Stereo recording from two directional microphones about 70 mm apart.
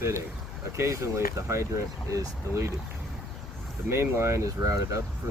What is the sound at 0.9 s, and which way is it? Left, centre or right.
Speech, right.